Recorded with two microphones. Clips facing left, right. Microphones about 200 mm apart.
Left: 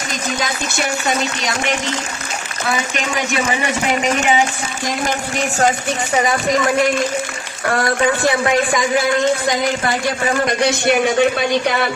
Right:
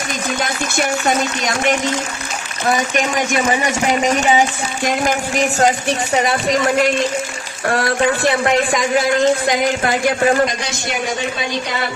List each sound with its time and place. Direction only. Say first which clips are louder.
1.0 s speech: right 2 dB; 50° right (ahead or behind)
10.6 s a man's voice: left 8 dB; 60° left (ahead or behind)